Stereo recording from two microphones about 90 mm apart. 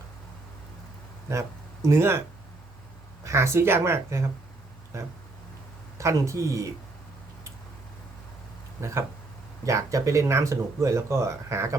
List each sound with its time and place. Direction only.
1.3 s speech: 35° right (ahead or behind)
3.2 s speech: 30° right (ahead or behind)
6.0 s speech: 35° right (ahead or behind)
9.6 s speech: 35° right (ahead or behind)